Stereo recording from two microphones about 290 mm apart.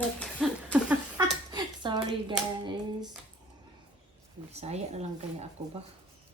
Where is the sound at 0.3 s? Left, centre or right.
Centre.